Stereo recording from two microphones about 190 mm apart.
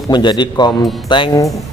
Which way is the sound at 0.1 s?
25° left (ahead or behind).